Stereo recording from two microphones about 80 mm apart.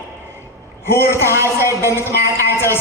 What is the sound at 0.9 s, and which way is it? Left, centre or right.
A man's voice, left.